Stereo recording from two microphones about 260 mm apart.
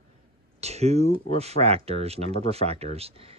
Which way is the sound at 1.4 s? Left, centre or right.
Right.